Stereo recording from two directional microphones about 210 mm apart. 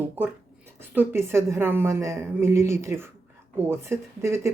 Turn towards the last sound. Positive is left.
turn(degrees=-10)  # may be behind; listen again after turning